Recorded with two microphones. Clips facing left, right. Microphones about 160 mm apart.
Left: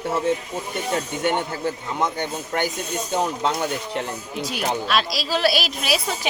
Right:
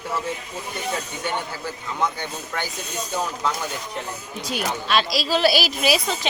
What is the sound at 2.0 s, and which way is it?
Speech, 20° left (ahead or behind).